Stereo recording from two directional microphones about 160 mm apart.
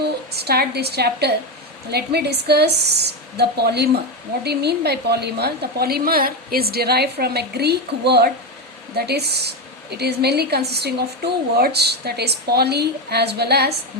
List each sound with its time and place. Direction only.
0.0 s a woman's voice: 90° right